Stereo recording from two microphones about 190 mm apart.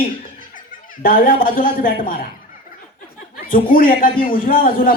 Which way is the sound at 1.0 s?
50° left (ahead or behind).